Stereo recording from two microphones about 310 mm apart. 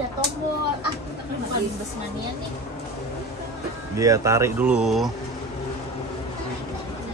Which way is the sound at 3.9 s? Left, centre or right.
Centre.